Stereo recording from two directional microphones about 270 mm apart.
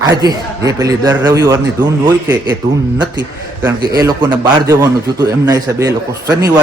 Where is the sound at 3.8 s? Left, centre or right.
Centre.